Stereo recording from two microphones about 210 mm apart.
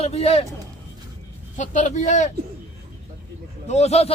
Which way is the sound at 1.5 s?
35° left (ahead or behind).